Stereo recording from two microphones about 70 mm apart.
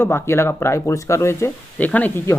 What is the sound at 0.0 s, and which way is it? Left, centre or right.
Speech, left.